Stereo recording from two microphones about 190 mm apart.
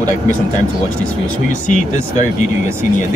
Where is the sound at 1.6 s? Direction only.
40° left (ahead or behind).